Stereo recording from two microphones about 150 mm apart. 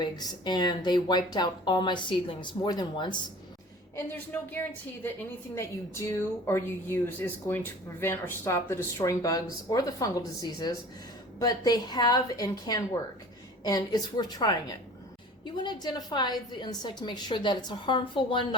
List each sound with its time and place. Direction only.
0.0 s speech: 30° left (ahead or behind)
3.9 s a woman's voice: 10° left (ahead or behind); by 18.4 s 35° left (ahead or behind)